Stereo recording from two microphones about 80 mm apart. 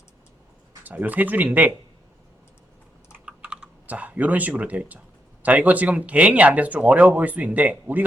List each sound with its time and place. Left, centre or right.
0.9 s speech: right
3.2 s typing: centre
5.4 s speech: centre